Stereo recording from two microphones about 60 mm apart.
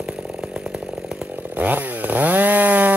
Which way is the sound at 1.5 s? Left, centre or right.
Right.